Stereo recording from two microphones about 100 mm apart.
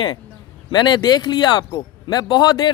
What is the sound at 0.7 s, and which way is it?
Speech, 45° left (ahead or behind).